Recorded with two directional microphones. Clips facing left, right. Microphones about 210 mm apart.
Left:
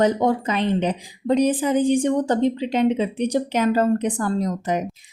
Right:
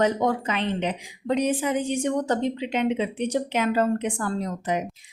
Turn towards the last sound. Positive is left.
turn(degrees=40)  # may be behind; listen again after turning